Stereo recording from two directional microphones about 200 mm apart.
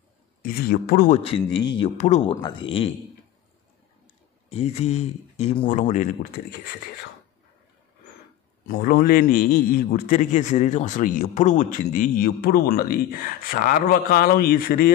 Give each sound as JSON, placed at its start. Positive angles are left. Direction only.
{"t": 0.4, "sound": "a man's voice", "side_deg": 50}
{"t": 1.1, "sound": "speech", "side_deg": 30}
{"t": 4.5, "sound": "speech", "side_deg": 30}
{"t": 8.6, "sound": "a man's voice", "side_deg": 45}